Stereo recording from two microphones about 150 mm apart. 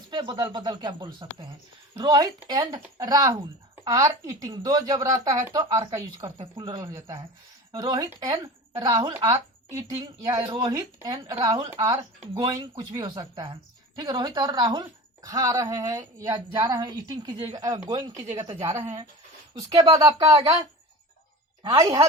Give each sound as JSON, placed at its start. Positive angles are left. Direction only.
{"t": 0.1, "sound": "speech", "side_deg": -30}
{"t": 10.4, "sound": "speech", "side_deg": -35}
{"t": 10.7, "sound": "speech", "side_deg": -20}
{"t": 21.7, "sound": "speech", "side_deg": -20}